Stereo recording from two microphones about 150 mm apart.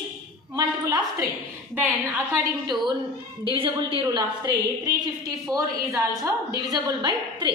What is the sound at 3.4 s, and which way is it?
A woman's voice, 35° right (ahead or behind).